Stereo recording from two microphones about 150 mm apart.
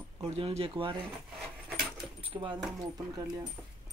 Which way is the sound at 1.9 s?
30° right (ahead or behind).